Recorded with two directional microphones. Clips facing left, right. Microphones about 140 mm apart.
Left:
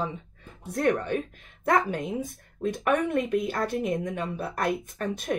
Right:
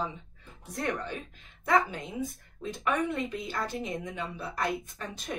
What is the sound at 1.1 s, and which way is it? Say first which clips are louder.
Speech: left 11 dB; 60° left (ahead or behind).